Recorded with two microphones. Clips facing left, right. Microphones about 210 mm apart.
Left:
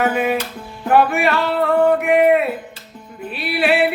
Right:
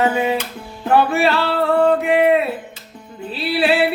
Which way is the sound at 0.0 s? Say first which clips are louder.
Even; 25° right (ahead or behind).